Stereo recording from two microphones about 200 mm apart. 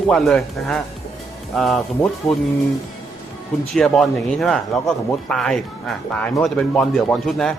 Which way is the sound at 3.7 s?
Centre (ahead or behind).